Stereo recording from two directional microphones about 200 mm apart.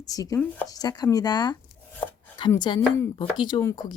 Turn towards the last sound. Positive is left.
turn(degrees=20)  # may be behind; listen again after turning